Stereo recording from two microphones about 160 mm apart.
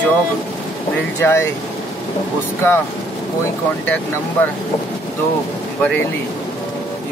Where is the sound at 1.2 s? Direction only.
15° left (ahead or behind).